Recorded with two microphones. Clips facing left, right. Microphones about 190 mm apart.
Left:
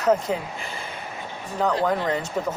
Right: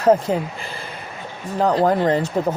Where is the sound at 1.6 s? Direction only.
35° right (ahead or behind).